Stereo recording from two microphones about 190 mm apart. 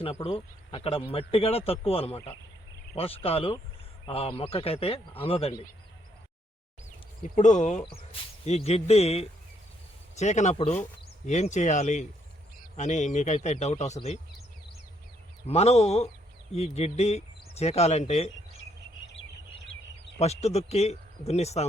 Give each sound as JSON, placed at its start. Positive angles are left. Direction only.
{"t": 0.3, "sound": "speech", "side_deg": 30}
{"t": 7.2, "sound": "speech", "side_deg": 40}
{"t": 15.4, "sound": "speech", "side_deg": 35}
{"t": 20.1, "sound": "speech", "side_deg": 35}